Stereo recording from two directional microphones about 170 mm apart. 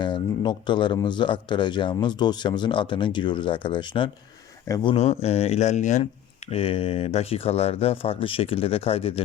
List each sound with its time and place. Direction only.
0.0 s speech: 25° left (ahead or behind)